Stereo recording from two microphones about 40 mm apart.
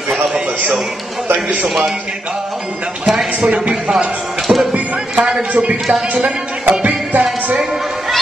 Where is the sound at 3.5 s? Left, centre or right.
Right.